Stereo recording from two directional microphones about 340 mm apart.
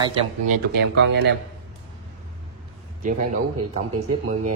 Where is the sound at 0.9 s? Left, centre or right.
Right.